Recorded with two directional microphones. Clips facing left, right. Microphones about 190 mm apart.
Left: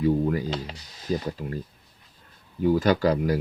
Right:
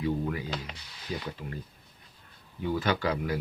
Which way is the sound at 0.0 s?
40° left (ahead or behind).